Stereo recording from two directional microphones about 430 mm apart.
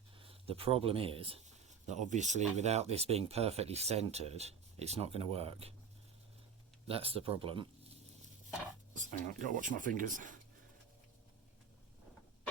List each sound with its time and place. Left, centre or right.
0.2 s speech: centre
6.8 s speech: centre
9.0 s speech: centre